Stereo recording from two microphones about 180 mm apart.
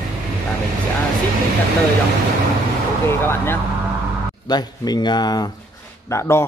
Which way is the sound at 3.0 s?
15° left (ahead or behind).